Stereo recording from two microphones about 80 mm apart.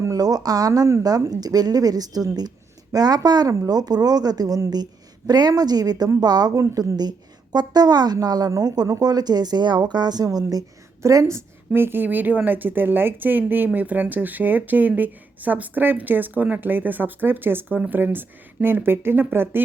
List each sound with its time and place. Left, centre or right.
0.0 s a woman's voice: right
6.6 s a woman's voice: right
7.5 s speech: right
11.0 s speech: right
17.7 s speech: centre
18.0 s speech: right